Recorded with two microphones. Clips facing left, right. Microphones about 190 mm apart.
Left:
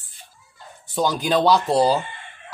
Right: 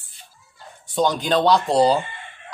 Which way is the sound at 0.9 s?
5° left (ahead or behind).